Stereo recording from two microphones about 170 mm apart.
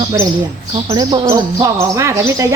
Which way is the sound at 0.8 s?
20° right (ahead or behind).